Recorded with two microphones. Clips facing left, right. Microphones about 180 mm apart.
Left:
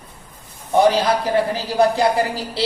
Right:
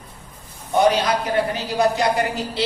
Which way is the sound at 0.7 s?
30° left (ahead or behind).